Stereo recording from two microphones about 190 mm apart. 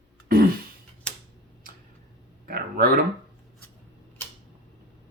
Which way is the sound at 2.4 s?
50° right (ahead or behind).